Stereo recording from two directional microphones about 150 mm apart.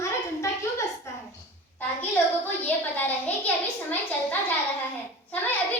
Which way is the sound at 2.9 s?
10° left (ahead or behind).